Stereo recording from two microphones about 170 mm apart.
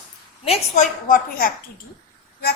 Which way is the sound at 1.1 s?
60° left (ahead or behind).